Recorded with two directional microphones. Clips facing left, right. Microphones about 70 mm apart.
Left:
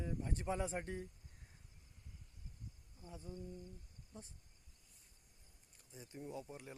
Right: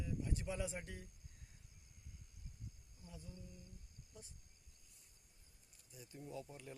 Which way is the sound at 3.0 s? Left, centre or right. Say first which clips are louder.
Left 7 dB; left.